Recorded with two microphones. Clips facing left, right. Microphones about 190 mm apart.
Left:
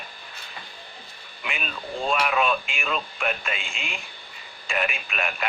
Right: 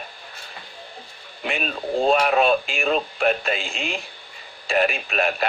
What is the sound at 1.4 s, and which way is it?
Speech, 40° right (ahead or behind).